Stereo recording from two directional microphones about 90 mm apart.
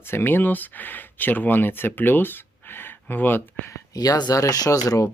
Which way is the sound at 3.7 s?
45° left (ahead or behind).